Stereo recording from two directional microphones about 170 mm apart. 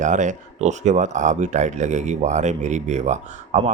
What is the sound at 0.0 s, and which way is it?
Speech, 45° right (ahead or behind).